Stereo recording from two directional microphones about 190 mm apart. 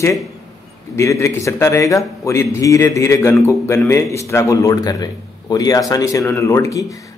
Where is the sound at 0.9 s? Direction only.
15° left (ahead or behind).